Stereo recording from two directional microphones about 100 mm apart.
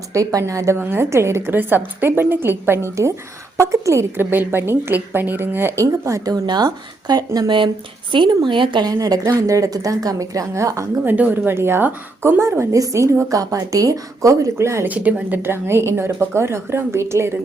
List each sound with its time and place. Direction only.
0.1 s a woman's voice: 35° right (ahead or behind)
5.8 s a woman's voice: 35° right (ahead or behind)
11.0 s a woman's voice: 15° right (ahead or behind)
14.8 s a woman's voice: 15° right (ahead or behind)